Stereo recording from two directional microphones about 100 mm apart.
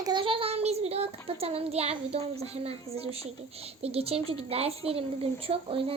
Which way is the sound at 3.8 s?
85° right.